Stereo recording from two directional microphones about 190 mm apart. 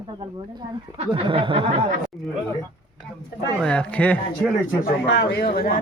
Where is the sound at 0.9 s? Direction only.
30° right (ahead or behind).